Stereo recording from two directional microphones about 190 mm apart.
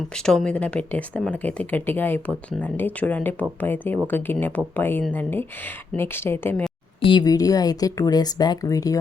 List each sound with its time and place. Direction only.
0.1 s speech: 5° left (ahead or behind)
7.0 s a woman's voice: 25° left (ahead or behind)